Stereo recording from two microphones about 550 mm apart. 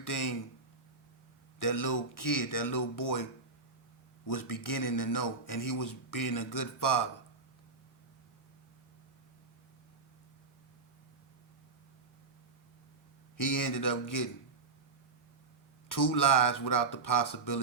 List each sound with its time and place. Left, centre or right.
0.0 s a man's voice: left
1.5 s a man's voice: left
4.3 s a man's voice: left
13.3 s a man's voice: left
15.9 s a man's voice: left